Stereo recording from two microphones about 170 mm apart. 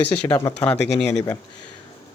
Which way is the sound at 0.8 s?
80° left.